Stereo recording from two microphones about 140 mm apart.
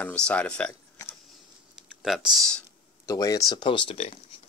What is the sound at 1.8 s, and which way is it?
Speech, centre (ahead or behind).